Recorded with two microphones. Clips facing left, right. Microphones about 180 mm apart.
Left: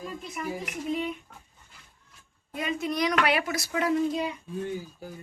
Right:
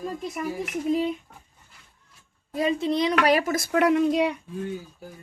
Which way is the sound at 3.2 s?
45° right (ahead or behind).